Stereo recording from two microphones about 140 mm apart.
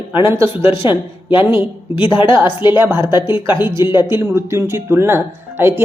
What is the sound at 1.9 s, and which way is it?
Speech, 40° left (ahead or behind).